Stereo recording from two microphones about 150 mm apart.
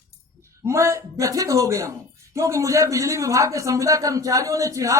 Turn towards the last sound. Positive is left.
turn(degrees=-20)  # may be behind; listen again after turning